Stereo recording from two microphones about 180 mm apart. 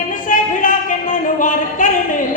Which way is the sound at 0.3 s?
50° left (ahead or behind).